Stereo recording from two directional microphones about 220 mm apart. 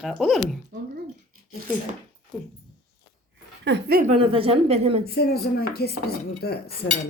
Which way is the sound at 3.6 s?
50° right (ahead or behind).